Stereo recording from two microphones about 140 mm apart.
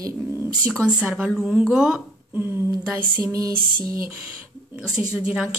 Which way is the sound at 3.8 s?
90° right.